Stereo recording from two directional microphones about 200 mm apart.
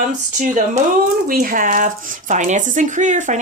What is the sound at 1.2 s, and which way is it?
Speech, 45° right (ahead or behind).